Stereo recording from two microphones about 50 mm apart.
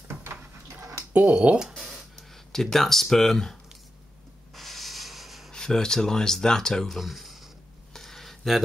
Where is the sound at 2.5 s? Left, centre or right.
Centre.